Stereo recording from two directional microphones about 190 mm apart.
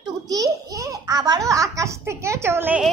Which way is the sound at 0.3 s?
15° right (ahead or behind).